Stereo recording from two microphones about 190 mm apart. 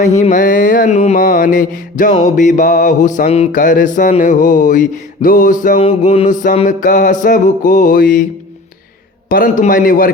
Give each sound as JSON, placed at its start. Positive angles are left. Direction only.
{"t": 0.0, "sound": "mantra", "side_deg": 40}
{"t": 5.8, "sound": "mantra", "side_deg": 35}
{"t": 9.3, "sound": "mantra", "side_deg": 45}